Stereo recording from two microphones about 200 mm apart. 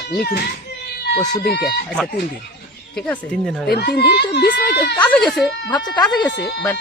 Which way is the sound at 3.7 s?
55° left (ahead or behind).